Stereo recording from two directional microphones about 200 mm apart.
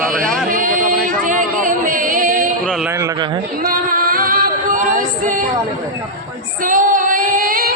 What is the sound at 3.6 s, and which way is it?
Female singing, 45° right (ahead or behind).